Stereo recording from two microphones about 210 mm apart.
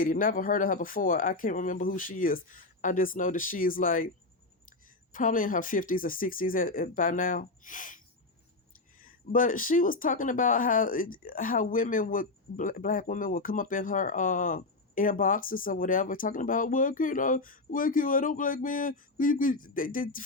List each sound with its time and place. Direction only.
0.0 s speech: 40° left (ahead or behind)
5.1 s speech: 40° left (ahead or behind)